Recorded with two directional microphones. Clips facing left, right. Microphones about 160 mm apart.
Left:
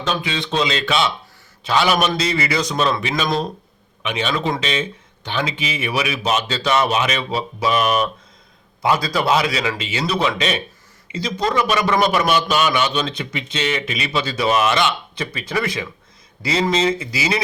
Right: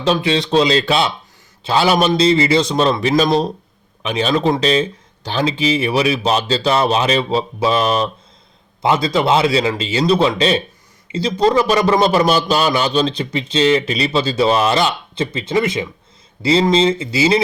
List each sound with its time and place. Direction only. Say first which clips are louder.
0.0 s a man's voice: right 7 dB; 35° right (ahead or behind)